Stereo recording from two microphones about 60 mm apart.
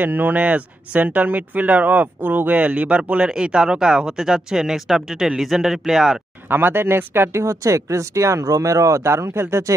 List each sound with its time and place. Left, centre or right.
0.0 s speech: right; by 6.2 s centre
6.5 s speech: right
7.4 s speech: right